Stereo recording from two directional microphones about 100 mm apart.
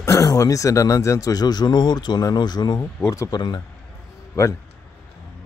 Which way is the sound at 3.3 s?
45° left (ahead or behind).